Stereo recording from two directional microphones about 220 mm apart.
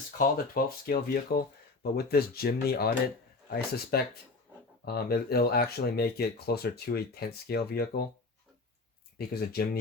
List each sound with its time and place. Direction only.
0.2 s speech: 40° left (ahead or behind)
3.9 s speech: 45° left (ahead or behind)
9.1 s speech: 45° left (ahead or behind)